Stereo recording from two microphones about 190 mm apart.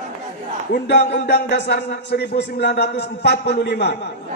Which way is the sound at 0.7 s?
65° left (ahead or behind).